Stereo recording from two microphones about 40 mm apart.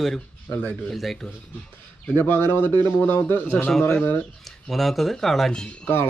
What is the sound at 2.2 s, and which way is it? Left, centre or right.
A man's voice, left.